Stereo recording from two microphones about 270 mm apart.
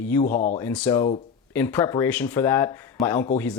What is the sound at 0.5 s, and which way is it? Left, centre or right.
Speech, centre.